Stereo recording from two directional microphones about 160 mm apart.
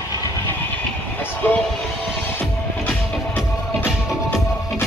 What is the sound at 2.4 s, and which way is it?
Music, 10° left (ahead or behind).